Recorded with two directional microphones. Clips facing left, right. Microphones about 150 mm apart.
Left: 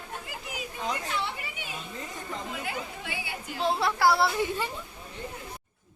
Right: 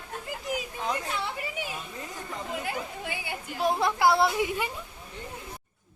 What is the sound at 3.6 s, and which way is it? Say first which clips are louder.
A woman's voice: right 1 dB; 15° right (ahead or behind).